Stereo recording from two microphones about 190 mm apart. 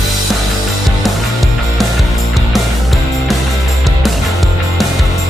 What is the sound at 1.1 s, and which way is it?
Music, centre (ahead or behind).